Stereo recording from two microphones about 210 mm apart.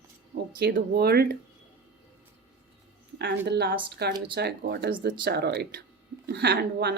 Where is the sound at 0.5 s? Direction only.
50° right (ahead or behind).